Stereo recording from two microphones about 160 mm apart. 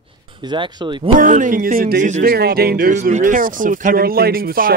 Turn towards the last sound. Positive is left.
turn(degrees=-65)  # may be behind; listen again after turning